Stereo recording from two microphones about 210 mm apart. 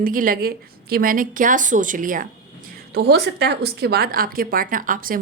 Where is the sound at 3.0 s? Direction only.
50° right (ahead or behind).